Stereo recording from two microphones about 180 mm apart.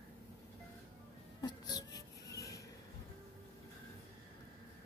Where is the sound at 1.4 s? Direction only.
20° left (ahead or behind).